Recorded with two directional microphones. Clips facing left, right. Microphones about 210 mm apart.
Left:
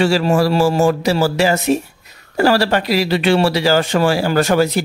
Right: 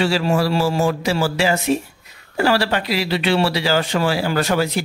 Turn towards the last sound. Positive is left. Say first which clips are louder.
# left 5 dB
turn(degrees=45)  # may be behind; listen again after turning